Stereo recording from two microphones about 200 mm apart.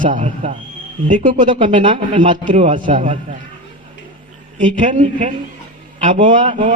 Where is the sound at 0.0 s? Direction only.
40° right (ahead or behind).